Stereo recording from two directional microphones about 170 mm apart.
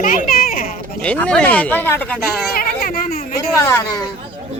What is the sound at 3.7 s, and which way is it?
Speech, 15° left (ahead or behind).